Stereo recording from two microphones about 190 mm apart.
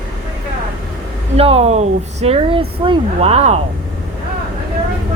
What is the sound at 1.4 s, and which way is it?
Speech, 30° right (ahead or behind).